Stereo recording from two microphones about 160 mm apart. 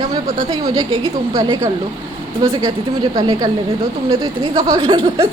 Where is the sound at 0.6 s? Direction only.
25° right (ahead or behind).